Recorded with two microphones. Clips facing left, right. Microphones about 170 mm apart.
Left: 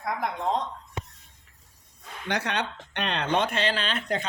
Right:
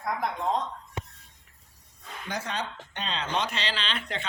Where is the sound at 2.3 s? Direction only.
70° left (ahead or behind).